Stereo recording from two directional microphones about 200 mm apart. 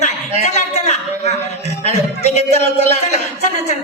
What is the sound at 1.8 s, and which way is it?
Speech, 35° left (ahead or behind).